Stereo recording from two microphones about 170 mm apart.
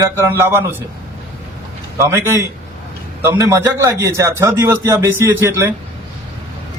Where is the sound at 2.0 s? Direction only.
15° right (ahead or behind).